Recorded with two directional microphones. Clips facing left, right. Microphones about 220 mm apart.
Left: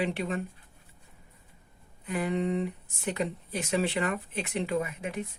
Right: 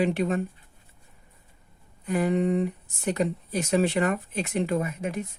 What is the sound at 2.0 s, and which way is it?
Speech, 45° right (ahead or behind).